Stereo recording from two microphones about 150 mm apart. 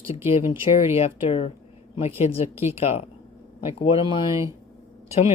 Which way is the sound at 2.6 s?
45° left (ahead or behind).